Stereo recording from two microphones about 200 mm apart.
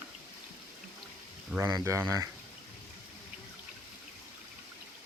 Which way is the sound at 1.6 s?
15° right (ahead or behind).